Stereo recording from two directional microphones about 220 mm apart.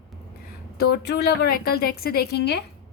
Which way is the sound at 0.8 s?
45° left (ahead or behind).